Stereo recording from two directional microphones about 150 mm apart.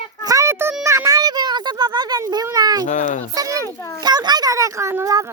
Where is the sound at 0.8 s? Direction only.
20° right (ahead or behind).